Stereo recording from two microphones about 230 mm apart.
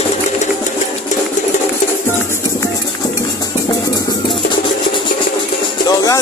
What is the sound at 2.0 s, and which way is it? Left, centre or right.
Music, centre.